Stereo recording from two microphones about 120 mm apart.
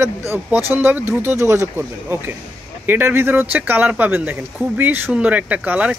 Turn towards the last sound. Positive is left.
turn(degrees=-10)  # may be behind; listen again after turning